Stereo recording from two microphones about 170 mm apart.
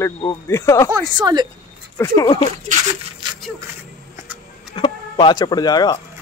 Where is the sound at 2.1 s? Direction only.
30° left (ahead or behind).